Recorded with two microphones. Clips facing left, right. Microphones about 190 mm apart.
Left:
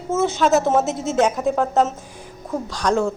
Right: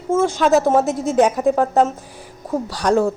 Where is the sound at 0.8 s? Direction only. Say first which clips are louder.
Right 3 dB; 55° right (ahead or behind).